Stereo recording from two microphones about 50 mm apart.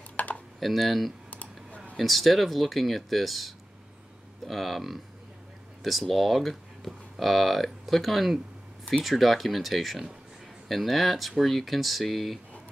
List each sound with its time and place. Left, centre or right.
0.1 s computer keyboard: left
0.6 s speech: centre
1.3 s computer keyboard: left
2.0 s speech: centre